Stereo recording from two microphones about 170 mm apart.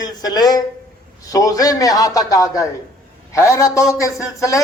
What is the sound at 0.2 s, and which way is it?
A man's voice, 25° left (ahead or behind).